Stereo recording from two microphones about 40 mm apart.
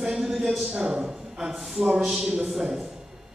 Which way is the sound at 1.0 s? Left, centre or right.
Centre.